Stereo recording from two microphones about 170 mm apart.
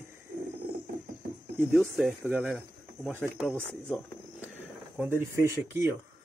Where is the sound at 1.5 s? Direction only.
10° right (ahead or behind).